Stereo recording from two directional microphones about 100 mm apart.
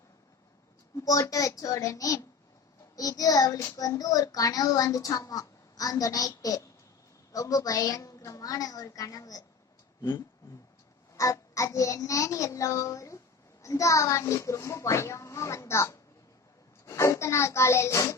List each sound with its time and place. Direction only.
0.9 s a child's voice: 35° left (ahead or behind)
11.1 s a child's voice: 35° left (ahead or behind)